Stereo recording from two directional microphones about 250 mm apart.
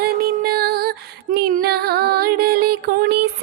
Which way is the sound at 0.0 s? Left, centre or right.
Right.